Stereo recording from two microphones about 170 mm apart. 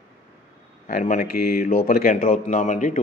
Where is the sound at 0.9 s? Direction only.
60° left (ahead or behind).